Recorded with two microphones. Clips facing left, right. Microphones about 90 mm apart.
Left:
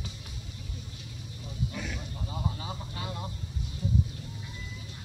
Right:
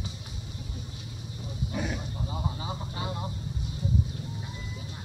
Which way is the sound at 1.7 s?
20° right (ahead or behind).